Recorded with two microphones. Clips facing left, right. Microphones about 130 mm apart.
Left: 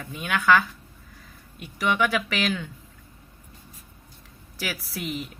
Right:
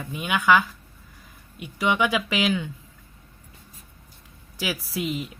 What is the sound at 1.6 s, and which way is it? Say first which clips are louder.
Speech: right 1 dB; 15° right (ahead or behind).